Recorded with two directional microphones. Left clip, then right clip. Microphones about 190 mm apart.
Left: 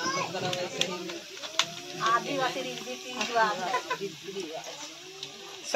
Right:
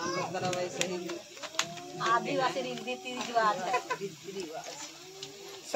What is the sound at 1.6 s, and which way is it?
Bird, 65° right (ahead or behind).